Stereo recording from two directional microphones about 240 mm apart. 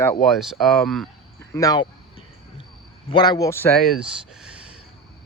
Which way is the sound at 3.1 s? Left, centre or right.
Centre.